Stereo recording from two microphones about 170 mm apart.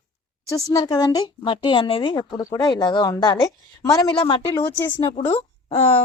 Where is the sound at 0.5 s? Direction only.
20° left (ahead or behind).